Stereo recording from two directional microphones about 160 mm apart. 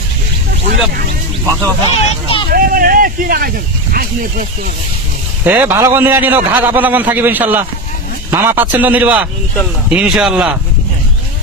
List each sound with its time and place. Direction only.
1.4 s speech: 20° right (ahead or behind)
2.0 s speech: 35° left (ahead or behind)
2.5 s speech: 65° right (ahead or behind)
5.4 s a man's voice: 10° right (ahead or behind)